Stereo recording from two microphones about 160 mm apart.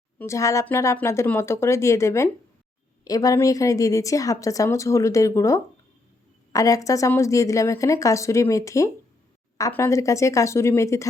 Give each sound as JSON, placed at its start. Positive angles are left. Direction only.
{"t": 0.2, "sound": "a woman's voice", "side_deg": 20}